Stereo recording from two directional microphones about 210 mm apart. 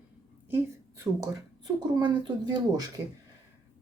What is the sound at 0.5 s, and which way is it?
A woman's voice, 15° right (ahead or behind).